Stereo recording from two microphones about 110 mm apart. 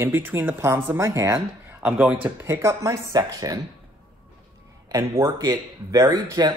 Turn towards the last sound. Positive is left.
turn(degrees=-35)  # may be behind; listen again after turning